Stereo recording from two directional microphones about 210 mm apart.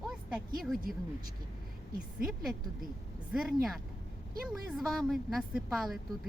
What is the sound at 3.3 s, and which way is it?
A woman's voice, 5° right (ahead or behind).